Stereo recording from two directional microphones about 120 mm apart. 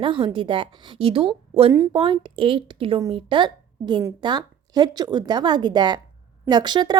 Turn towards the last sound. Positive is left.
turn(degrees=-40)  # may be behind; listen again after turning